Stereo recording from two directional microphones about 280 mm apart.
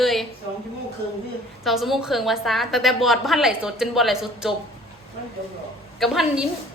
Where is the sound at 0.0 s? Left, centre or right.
Centre.